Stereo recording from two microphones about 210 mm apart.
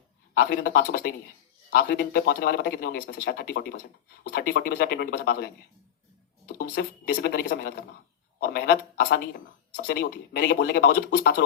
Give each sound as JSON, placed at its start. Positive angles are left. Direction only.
{"t": 0.3, "sound": "speech", "side_deg": 45}
{"t": 6.6, "sound": "speech", "side_deg": 45}